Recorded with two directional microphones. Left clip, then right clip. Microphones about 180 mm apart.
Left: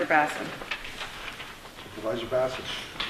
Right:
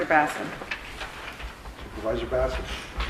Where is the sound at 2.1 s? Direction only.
45° left (ahead or behind).